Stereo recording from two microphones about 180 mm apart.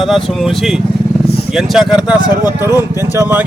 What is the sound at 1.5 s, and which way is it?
Speech, centre (ahead or behind).